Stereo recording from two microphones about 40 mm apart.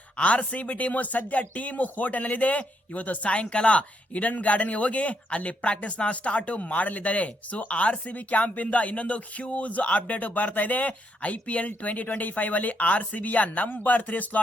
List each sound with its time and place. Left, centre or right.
0.2 s speech: left